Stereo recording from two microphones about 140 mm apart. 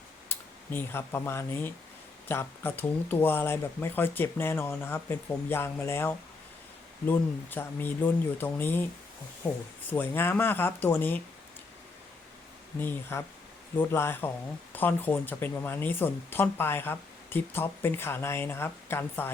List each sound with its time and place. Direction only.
0.3 s speech: 15° left (ahead or behind)
9.9 s speech: 15° left (ahead or behind)
12.8 s speech: 15° left (ahead or behind)